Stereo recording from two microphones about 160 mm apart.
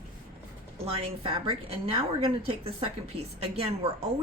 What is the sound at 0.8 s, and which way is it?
A woman's voice, 35° right (ahead or behind).